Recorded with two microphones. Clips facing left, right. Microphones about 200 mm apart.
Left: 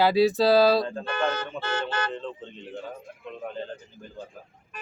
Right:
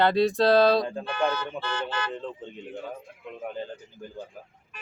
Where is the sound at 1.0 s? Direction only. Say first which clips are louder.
Even; 50° left (ahead or behind).